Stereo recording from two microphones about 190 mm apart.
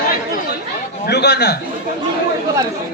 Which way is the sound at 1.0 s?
60° left (ahead or behind).